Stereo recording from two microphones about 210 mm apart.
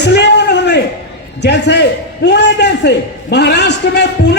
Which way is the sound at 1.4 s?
55° left (ahead or behind).